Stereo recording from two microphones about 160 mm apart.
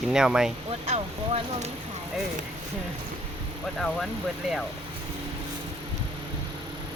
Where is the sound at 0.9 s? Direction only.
40° right (ahead or behind).